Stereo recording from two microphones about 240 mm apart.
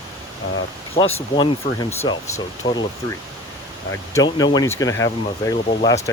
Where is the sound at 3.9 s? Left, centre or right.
Centre.